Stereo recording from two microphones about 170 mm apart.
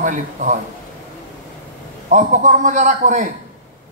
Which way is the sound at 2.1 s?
45° right (ahead or behind).